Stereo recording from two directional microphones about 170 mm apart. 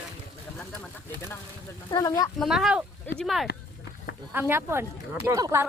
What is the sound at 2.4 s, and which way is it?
Speech, centre (ahead or behind).